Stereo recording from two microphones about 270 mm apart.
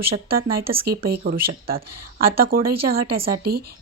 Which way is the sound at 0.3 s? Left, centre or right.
Right.